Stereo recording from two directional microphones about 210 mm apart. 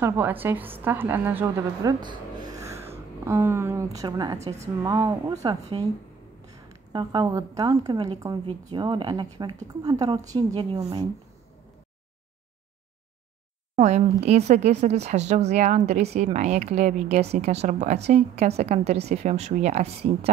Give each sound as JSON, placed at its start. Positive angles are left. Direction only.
{"t": 0.0, "sound": "a woman's voice", "side_deg": -10}
{"t": 4.4, "sound": "a woman's voice", "side_deg": -30}
{"t": 4.8, "sound": "a woman's voice", "side_deg": -20}
{"t": 6.9, "sound": "a woman's voice", "side_deg": -20}
{"t": 13.7, "sound": "a woman's voice", "side_deg": -30}